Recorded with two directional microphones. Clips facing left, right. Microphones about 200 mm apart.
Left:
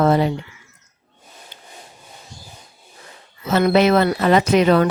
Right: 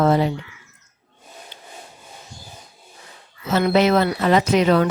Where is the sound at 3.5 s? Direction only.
60° left (ahead or behind).